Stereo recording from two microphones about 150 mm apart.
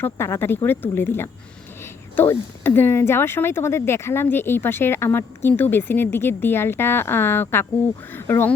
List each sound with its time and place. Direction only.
0.0 s speech: 15° left (ahead or behind)